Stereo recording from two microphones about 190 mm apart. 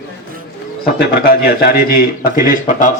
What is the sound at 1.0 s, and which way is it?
Speech, 55° left (ahead or behind).